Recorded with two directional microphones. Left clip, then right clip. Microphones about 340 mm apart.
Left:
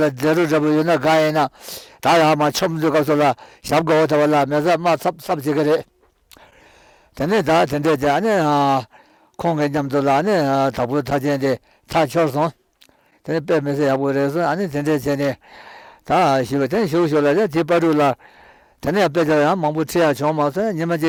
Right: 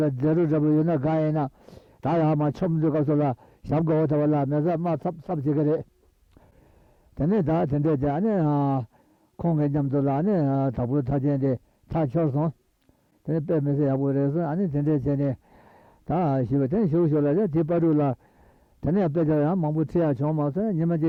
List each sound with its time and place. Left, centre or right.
0.0 s a man's voice: centre
7.2 s a man's voice: centre